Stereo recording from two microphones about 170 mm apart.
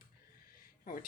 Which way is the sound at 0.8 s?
55° left (ahead or behind).